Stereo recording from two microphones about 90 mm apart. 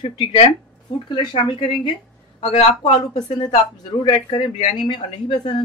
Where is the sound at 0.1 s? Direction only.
75° left (ahead or behind).